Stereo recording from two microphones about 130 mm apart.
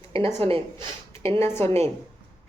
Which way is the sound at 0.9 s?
20° left (ahead or behind).